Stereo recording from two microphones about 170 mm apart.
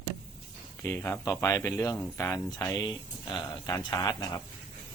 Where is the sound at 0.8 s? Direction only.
15° left (ahead or behind).